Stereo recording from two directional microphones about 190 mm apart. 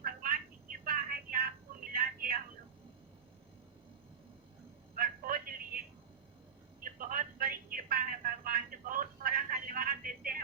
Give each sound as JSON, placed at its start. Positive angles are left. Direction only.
{"t": 0.0, "sound": "telephone", "side_deg": -50}
{"t": 0.9, "sound": "a sound", "side_deg": -50}
{"t": 1.9, "sound": "telephone", "side_deg": -50}
{"t": 4.9, "sound": "telephone", "side_deg": -50}